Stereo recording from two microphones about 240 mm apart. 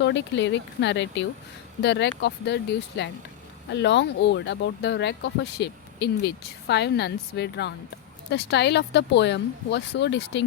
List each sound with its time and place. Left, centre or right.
0.0 s speech: left
3.7 s speech: left